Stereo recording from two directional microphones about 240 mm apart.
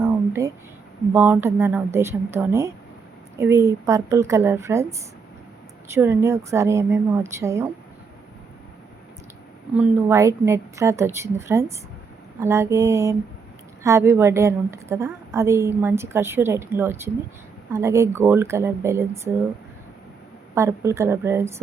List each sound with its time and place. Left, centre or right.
0.0 s a sound: centre
1.1 s a woman's voice: centre
9.7 s a woman's voice: centre
20.6 s a woman's voice: centre